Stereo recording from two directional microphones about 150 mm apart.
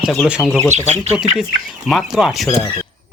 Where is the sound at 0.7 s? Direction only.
50° right (ahead or behind).